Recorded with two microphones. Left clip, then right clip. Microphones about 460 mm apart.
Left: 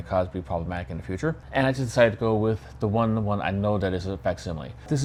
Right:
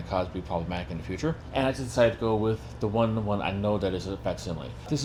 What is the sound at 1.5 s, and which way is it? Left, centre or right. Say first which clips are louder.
Speech: left 4 dB; left.